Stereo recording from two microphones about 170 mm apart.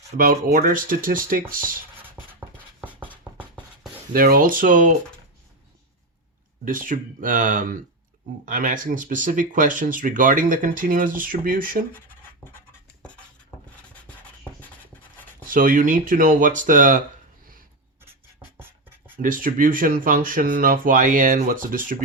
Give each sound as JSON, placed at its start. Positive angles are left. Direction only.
{"t": 0.2, "sound": "speech", "side_deg": -55}
{"t": 4.1, "sound": "speech", "side_deg": -55}
{"t": 6.7, "sound": "speech", "side_deg": -50}
{"t": 15.4, "sound": "speech", "side_deg": -55}
{"t": 18.9, "sound": "writing", "side_deg": -10}
{"t": 19.2, "sound": "speech", "side_deg": -55}